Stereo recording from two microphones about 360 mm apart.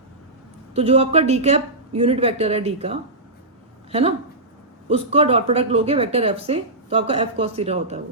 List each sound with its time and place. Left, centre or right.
0.7 s speech: centre
4.9 s speech: centre